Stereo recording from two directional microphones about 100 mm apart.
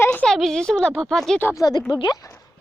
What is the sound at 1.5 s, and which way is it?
Speech, 40° left (ahead or behind).